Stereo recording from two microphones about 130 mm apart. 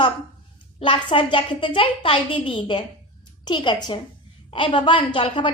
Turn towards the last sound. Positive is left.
turn(degrees=40)  # may be behind; listen again after turning